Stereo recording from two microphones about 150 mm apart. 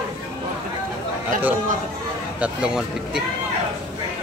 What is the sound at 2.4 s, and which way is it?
Speech, 5° right (ahead or behind).